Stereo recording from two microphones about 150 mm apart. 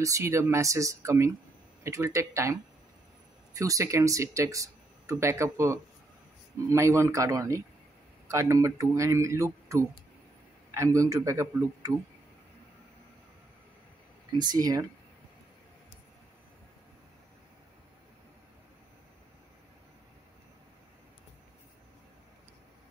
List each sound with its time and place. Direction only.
0.0 s speech: 20° right (ahead or behind)
14.4 s speech: 25° right (ahead or behind)